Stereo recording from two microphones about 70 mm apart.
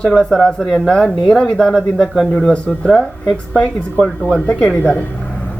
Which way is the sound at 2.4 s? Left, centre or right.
Centre.